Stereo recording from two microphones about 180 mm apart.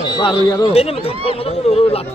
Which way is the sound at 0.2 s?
25° left (ahead or behind).